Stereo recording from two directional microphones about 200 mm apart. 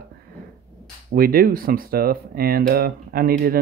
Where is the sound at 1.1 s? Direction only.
45° right (ahead or behind).